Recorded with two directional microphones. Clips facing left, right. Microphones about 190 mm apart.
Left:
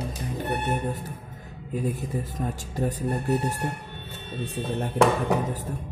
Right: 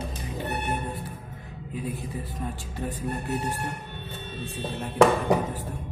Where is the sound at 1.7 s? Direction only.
45° left (ahead or behind).